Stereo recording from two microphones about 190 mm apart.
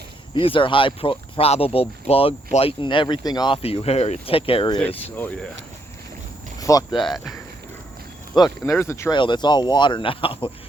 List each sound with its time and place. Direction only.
0.3 s speech: 25° left (ahead or behind)
5.1 s speech: 10° left (ahead or behind)
6.6 s cricket: 20° left (ahead or behind)
6.9 s speech: centre (ahead or behind)
8.7 s speech: 15° left (ahead or behind)